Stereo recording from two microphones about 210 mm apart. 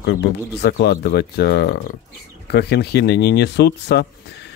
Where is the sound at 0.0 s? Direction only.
55° left (ahead or behind).